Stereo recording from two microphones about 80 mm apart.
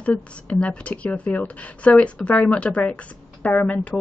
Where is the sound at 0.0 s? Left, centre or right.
Centre.